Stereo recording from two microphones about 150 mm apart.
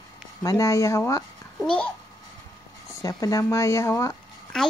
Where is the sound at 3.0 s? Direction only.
25° left (ahead or behind).